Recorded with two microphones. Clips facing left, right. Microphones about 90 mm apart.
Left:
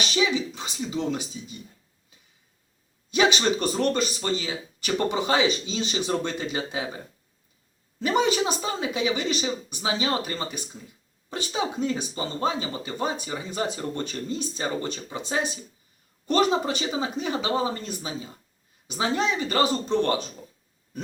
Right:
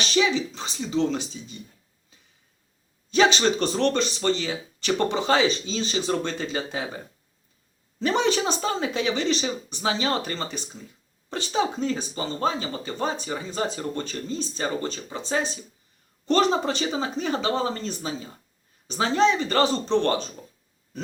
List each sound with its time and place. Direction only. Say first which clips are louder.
0.2 s speech: right 2 dB; 15° left (ahead or behind)
3.1 s speech: right 2 dB; 15° left (ahead or behind)
8.0 s speech: even; 10° left (ahead or behind)